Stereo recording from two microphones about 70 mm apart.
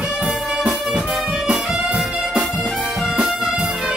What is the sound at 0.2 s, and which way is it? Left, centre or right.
Music, centre.